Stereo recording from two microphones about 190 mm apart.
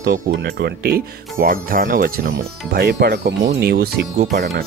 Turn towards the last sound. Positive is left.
turn(degrees=-60)  # may be behind; listen again after turning